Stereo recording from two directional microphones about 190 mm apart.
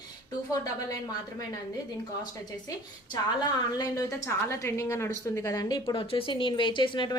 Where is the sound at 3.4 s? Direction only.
20° left (ahead or behind).